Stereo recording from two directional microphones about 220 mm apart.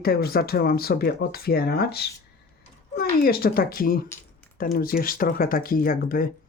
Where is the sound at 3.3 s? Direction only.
45° left (ahead or behind).